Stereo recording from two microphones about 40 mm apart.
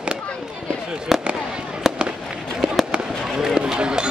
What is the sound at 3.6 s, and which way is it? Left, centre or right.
Basketball bounce, right.